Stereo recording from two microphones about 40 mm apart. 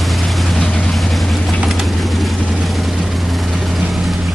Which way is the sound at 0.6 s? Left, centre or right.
Left.